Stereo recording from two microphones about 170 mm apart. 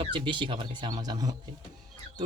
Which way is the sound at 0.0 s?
30° right (ahead or behind).